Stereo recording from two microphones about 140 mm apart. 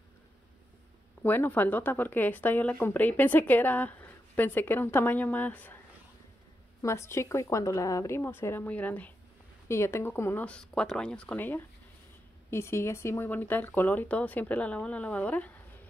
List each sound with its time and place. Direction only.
1.2 s speech: 15° left (ahead or behind)
6.8 s speech: 20° left (ahead or behind)